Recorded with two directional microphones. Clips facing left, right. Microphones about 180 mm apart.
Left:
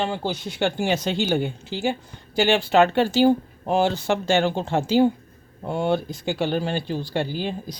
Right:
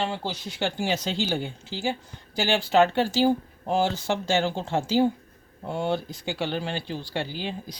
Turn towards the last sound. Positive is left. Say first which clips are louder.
# left 5 dB
turn(degrees=45)  # may be behind; listen again after turning